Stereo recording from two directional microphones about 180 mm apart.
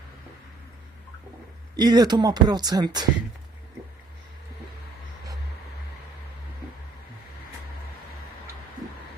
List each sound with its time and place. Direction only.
1.7 s speech: 20° right (ahead or behind)